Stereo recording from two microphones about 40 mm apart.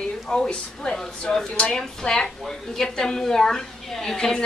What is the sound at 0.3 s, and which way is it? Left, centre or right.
A woman's voice, left.